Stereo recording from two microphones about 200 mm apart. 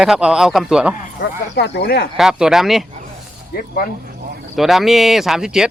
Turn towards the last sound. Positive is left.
turn(degrees=-5)  # may be behind; listen again after turning